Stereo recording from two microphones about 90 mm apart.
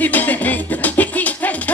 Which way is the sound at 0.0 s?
20° left (ahead or behind).